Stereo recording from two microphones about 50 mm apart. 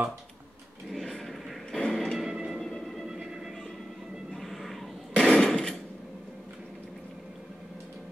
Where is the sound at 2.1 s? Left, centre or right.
Centre.